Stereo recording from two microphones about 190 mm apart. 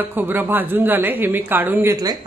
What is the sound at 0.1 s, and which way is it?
Speech, 10° right (ahead or behind).